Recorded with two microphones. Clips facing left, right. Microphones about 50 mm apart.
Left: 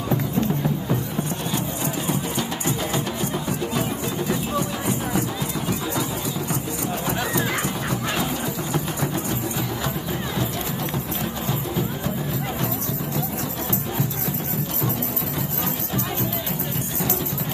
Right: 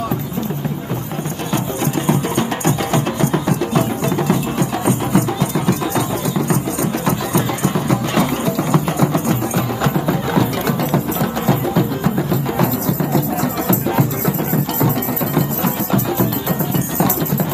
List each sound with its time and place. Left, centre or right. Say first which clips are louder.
2.0 s music: right 8 dB; right
7.1 s music: right 3 dB; right
11.4 s music: right 10 dB; right
13.7 s music: right 10 dB; right